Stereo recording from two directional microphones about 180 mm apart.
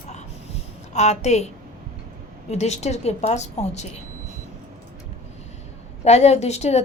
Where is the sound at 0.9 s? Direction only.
40° left (ahead or behind).